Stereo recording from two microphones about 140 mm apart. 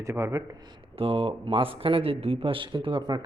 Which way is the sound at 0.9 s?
45° right (ahead or behind).